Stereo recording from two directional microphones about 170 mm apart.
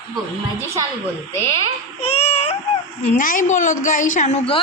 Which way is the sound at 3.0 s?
50° left (ahead or behind).